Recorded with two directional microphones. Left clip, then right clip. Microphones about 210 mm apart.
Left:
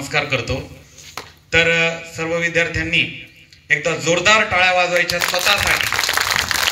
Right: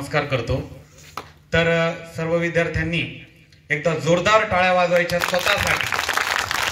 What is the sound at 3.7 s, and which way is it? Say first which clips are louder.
A man's voice: left 3 dB; 50° right (ahead or behind).